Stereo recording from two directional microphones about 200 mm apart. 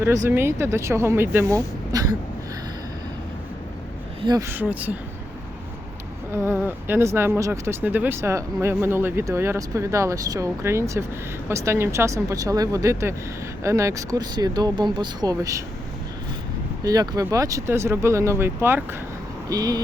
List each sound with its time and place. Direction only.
0.3 s speech: 10° right (ahead or behind)
4.2 s speech: 20° right (ahead or behind)
6.3 s speech: 10° right (ahead or behind)
16.8 s speech: 20° right (ahead or behind)